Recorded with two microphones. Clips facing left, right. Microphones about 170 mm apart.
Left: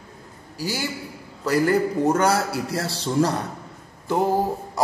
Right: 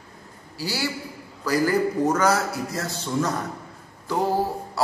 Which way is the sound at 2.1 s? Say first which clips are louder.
Left 1 dB; 30° left (ahead or behind).